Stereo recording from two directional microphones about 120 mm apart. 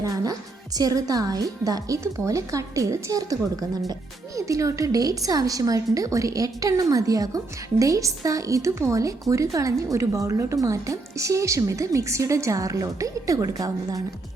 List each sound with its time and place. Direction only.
0.0 s music: 30° right (ahead or behind)
0.8 s a woman's voice: 30° right (ahead or behind)